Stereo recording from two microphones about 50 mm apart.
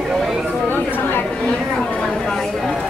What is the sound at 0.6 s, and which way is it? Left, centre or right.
Chatter, left.